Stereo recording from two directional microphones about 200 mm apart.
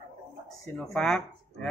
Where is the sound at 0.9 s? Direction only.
5° left (ahead or behind).